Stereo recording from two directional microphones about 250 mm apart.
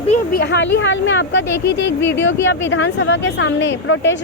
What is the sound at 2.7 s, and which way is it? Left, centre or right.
Speech, left.